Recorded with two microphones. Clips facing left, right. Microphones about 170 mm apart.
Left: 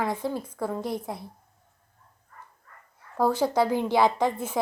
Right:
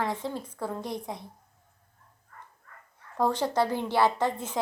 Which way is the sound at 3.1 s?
10° left (ahead or behind).